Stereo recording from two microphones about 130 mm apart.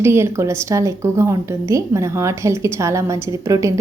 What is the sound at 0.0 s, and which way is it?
A woman's voice, 20° right (ahead or behind).